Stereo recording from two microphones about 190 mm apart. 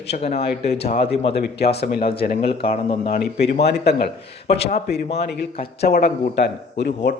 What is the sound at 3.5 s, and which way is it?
Speech, 60° left (ahead or behind).